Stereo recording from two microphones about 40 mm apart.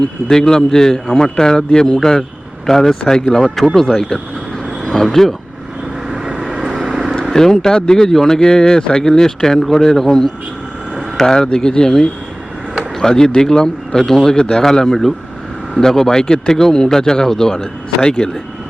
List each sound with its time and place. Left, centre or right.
0.3 s speech: centre
6.1 s vehicle: centre
7.3 s speech: centre
18.0 s speech: left